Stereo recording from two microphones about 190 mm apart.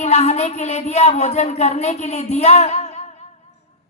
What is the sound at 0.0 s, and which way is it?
Speech, 35° left (ahead or behind).